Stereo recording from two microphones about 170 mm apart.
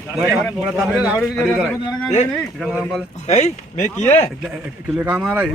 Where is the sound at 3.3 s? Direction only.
40° left (ahead or behind).